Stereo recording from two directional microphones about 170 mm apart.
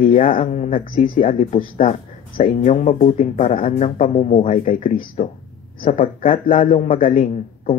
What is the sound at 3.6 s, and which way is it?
Speech, 35° left (ahead or behind).